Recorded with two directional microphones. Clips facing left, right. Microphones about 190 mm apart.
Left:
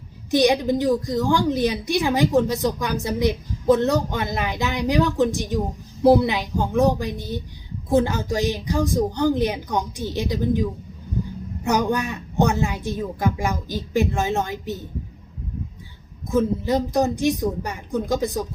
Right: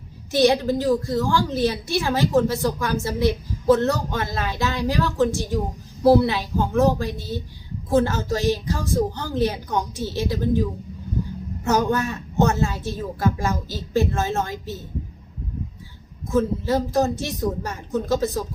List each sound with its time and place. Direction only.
0.3 s a woman's voice: 15° left (ahead or behind)
11.6 s a woman's voice: 15° left (ahead or behind)
16.3 s a woman's voice: 15° left (ahead or behind)